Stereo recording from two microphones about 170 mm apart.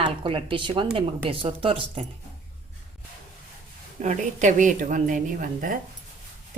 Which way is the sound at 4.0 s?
45° right (ahead or behind).